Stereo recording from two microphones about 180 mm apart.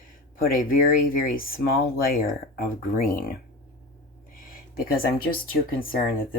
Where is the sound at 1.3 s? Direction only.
55° left (ahead or behind).